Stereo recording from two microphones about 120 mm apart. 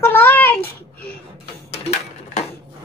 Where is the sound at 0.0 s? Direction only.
20° left (ahead or behind).